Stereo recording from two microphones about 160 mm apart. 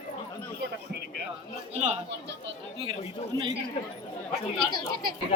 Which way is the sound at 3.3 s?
25° right (ahead or behind).